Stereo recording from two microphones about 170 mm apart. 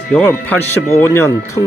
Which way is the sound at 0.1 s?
10° left (ahead or behind).